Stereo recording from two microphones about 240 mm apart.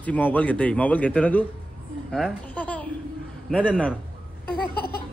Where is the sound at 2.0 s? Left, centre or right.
Centre.